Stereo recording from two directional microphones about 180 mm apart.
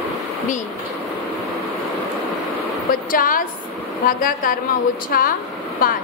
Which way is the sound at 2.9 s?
50° left (ahead or behind).